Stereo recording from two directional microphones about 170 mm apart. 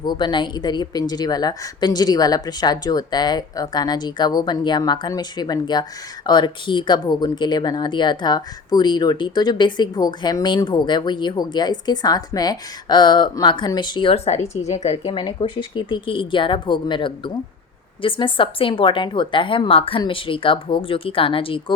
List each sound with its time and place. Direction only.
0.0 s a woman's voice: 25° left (ahead or behind)